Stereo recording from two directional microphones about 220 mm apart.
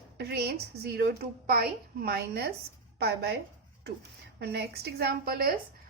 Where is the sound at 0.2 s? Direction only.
50° right (ahead or behind).